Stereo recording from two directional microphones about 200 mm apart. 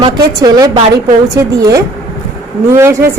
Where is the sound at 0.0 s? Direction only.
20° right (ahead or behind).